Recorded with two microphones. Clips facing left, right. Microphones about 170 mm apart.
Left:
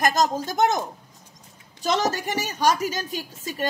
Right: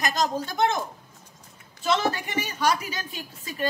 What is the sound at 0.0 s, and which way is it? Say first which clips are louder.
Speech: left 4 dB; 45° left (ahead or behind).